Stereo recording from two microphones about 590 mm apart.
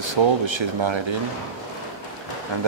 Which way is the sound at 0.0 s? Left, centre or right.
Right.